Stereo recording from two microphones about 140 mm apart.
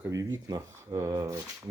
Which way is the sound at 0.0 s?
20° right (ahead or behind).